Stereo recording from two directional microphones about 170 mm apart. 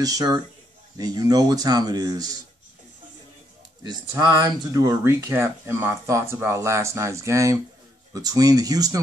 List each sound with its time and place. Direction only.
0.0 s a man's voice: 20° right (ahead or behind)
4.1 s a man's voice: 20° right (ahead or behind)